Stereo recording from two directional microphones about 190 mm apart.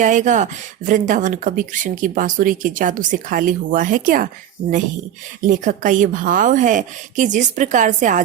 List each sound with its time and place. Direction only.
0.0 s speech: 40° right (ahead or behind)
5.5 s speech: 40° right (ahead or behind)